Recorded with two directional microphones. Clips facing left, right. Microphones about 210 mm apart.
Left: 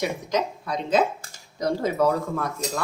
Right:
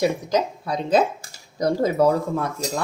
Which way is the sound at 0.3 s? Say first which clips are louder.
Right 3 dB; 30° right (ahead or behind).